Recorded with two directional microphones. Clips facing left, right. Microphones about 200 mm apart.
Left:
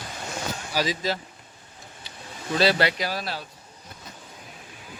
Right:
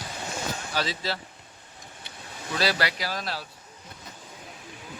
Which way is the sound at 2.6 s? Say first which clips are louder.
Left 5 dB; 25° left (ahead or behind).